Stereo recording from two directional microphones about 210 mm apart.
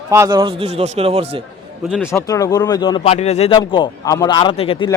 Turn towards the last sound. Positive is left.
turn(degrees=25)  # may be behind; listen again after turning